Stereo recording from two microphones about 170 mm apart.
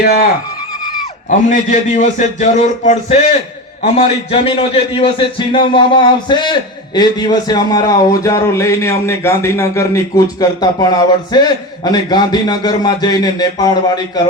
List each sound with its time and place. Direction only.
0.0 s speech: 65° left (ahead or behind)
1.3 s a man's voice: 50° left (ahead or behind); by 14.0 s 25° left (ahead or behind)